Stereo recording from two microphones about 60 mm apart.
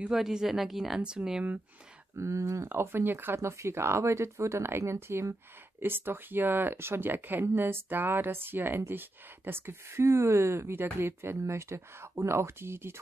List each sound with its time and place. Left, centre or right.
0.1 s a woman's voice: centre
2.1 s speech: right
2.7 s speech: right
3.3 s speech: right